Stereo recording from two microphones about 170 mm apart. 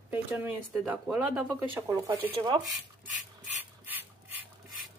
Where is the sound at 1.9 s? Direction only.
20° right (ahead or behind).